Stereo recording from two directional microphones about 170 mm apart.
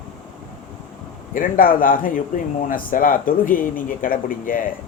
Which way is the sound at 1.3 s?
55° left (ahead or behind).